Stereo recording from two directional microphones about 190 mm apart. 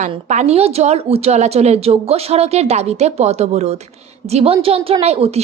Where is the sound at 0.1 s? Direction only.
35° right (ahead or behind).